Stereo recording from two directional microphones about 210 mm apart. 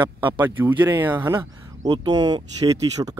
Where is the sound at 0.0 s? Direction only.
20° right (ahead or behind).